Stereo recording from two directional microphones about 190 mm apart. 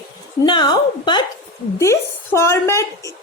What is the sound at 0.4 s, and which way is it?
A woman's voice, 25° left (ahead or behind).